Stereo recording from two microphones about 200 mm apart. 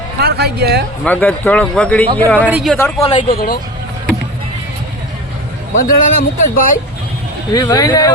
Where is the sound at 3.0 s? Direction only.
30° left (ahead or behind).